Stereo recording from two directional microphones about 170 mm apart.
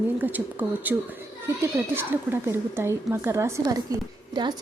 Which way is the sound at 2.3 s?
15° right (ahead or behind).